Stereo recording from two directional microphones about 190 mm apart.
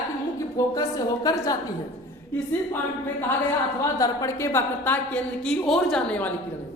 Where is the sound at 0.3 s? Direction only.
15° left (ahead or behind).